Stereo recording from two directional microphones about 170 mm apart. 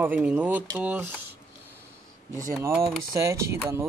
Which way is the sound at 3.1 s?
15° right (ahead or behind).